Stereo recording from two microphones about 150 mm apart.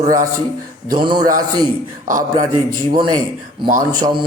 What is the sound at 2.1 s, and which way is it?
Speech, 65° right (ahead or behind).